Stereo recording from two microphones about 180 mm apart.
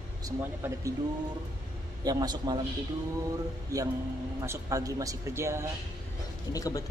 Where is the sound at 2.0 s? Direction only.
20° right (ahead or behind).